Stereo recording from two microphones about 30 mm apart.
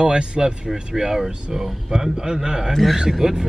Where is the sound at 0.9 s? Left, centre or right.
Centre.